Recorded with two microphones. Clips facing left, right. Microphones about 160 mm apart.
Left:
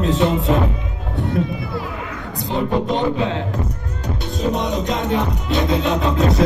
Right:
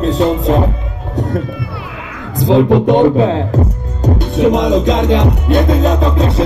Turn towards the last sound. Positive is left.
turn(degrees=-30)  # may be behind; listen again after turning